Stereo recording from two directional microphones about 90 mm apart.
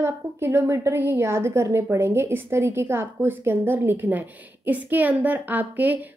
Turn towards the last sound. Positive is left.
turn(degrees=-20)  # may be behind; listen again after turning